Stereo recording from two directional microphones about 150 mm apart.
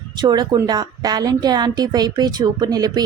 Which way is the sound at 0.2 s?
30° right (ahead or behind).